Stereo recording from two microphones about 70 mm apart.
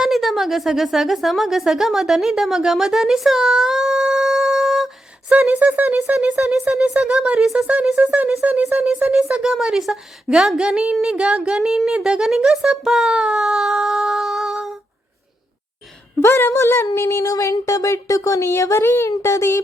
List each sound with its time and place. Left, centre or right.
0.0 s a woman's voice: centre
5.5 s speech: right
6.1 s speech: centre
8.0 s speech: centre
16.2 s a woman's voice: left